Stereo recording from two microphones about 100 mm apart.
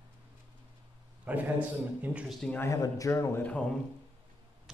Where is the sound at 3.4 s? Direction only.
15° left (ahead or behind).